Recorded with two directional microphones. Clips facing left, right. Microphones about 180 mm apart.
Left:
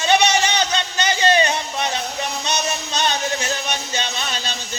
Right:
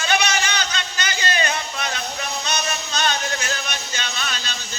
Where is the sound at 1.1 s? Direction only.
25° left (ahead or behind).